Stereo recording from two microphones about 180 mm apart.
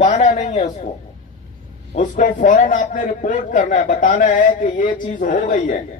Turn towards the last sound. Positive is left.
turn(degrees=45)  # may be behind; listen again after turning